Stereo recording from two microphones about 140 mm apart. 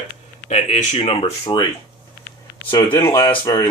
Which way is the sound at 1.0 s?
45° left (ahead or behind).